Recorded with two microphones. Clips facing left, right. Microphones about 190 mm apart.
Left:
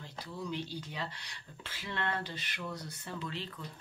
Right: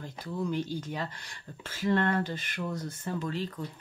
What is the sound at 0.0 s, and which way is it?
Speech, 45° right (ahead or behind).